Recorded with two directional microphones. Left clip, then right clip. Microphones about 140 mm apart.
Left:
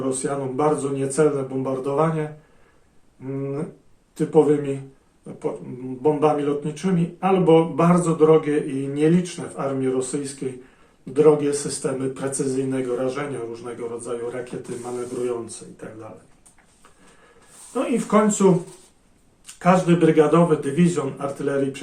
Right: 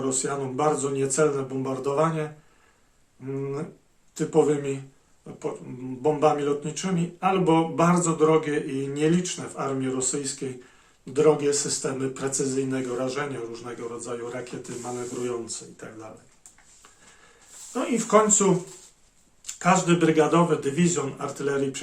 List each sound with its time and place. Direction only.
0.1 s speech: 35° right (ahead or behind)
4.1 s speech: 35° right (ahead or behind)
6.0 s speech: 35° right (ahead or behind)
17.7 s speech: 25° right (ahead or behind)
19.5 s speech: 30° right (ahead or behind)